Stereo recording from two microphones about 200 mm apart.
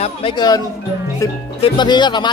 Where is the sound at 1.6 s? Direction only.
20° left (ahead or behind).